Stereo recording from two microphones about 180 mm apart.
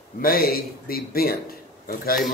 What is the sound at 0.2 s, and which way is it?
Speech, 55° left (ahead or behind).